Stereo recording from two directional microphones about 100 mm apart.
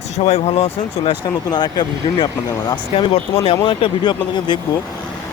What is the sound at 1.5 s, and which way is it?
Speech, 45° left (ahead or behind).